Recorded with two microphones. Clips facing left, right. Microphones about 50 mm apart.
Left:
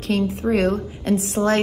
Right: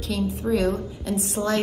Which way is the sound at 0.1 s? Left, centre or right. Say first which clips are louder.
Left 4 dB; left.